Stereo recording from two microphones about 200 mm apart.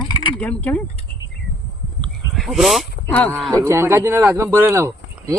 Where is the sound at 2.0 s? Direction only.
Centre (ahead or behind).